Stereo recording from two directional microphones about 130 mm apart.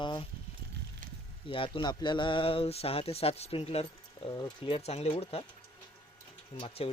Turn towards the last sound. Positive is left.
turn(degrees=45)  # may be behind; listen again after turning